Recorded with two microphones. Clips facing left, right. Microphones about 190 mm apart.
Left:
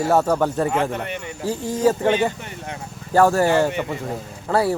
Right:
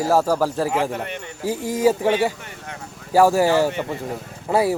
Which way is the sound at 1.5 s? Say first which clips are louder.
Right 1 dB; 15° right (ahead or behind).